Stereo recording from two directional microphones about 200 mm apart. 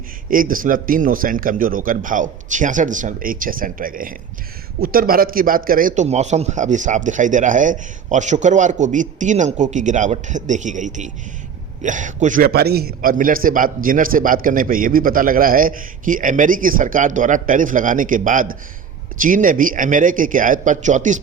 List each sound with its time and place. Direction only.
0.3 s a man's voice: 45° right (ahead or behind)